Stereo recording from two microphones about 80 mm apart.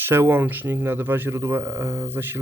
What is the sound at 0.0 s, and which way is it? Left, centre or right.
Speech, right.